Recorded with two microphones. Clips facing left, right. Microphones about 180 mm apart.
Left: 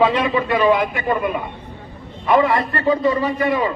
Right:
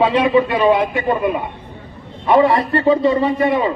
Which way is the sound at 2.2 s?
30° right (ahead or behind).